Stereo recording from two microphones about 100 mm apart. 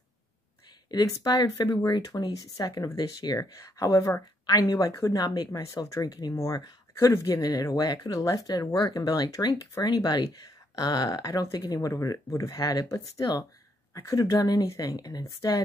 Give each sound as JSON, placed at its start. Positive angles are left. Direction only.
{"t": 0.8, "sound": "speech", "side_deg": 40}